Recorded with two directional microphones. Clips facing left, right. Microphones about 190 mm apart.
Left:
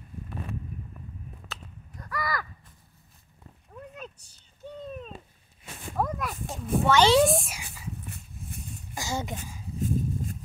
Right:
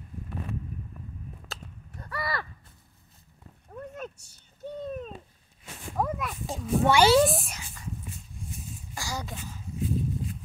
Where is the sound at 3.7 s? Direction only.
45° right (ahead or behind).